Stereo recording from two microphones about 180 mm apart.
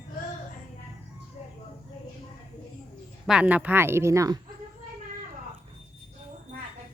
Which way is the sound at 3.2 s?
5° right (ahead or behind).